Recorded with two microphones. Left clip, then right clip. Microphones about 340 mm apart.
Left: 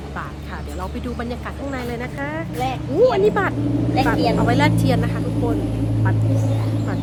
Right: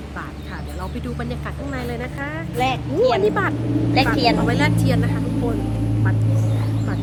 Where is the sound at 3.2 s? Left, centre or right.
Centre.